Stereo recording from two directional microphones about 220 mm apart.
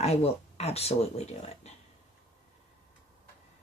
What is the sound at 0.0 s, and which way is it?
Speech, 30° left (ahead or behind).